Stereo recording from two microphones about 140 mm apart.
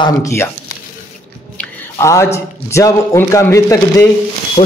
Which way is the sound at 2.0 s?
20° left (ahead or behind).